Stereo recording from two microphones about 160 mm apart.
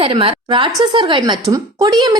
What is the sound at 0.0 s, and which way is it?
A woman's voice, 35° right (ahead or behind).